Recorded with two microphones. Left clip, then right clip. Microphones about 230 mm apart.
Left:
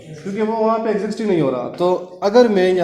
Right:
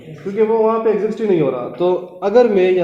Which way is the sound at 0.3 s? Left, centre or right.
Left.